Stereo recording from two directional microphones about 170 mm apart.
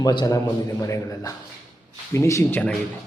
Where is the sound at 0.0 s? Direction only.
25° left (ahead or behind).